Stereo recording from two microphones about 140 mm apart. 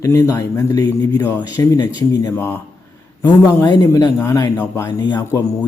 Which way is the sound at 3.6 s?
30° left (ahead or behind).